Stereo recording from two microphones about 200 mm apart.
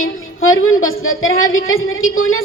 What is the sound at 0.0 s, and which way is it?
A woman's voice, 90° left.